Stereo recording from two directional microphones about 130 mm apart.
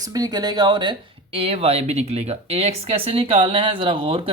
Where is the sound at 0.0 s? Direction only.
30° right (ahead or behind).